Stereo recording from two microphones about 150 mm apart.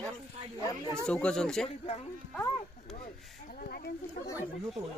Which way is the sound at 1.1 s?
5° left (ahead or behind).